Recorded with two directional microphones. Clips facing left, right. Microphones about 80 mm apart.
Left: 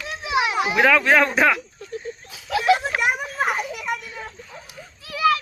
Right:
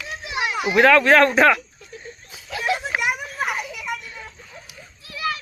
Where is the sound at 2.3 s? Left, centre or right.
Left.